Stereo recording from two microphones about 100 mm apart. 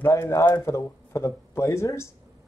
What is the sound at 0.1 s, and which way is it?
Speech, 30° left (ahead or behind).